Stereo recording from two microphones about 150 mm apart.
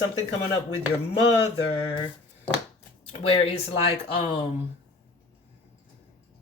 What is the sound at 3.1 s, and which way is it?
Speech, 40° left (ahead or behind).